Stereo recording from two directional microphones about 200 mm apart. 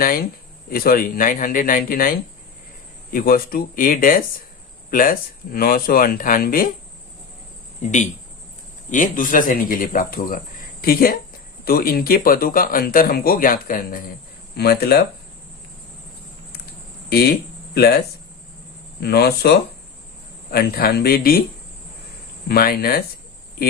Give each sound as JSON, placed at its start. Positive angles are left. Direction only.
{"t": 0.0, "sound": "speech", "side_deg": 45}
{"t": 7.8, "sound": "speech", "side_deg": 35}
{"t": 17.1, "sound": "speech", "side_deg": 50}
{"t": 18.9, "sound": "speech", "side_deg": 50}
{"t": 22.4, "sound": "speech", "side_deg": 50}